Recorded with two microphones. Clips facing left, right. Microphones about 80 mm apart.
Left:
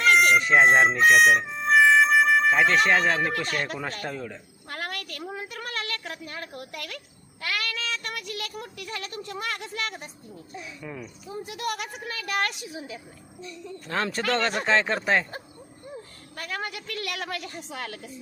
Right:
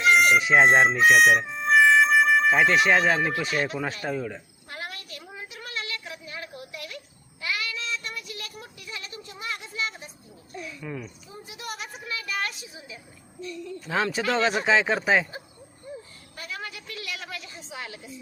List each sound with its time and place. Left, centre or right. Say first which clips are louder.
0.1 s speech: even; centre
4.7 s a sound: left 3 dB; left
7.4 s child singing: left 1 dB; left
10.5 s speech: right 3 dB; centre
10.8 s speech: right 1 dB; centre
11.4 s a woman's voice: left 5 dB; left
13.7 s speech: right 2 dB; centre
16.4 s a woman's voice: left 4 dB; left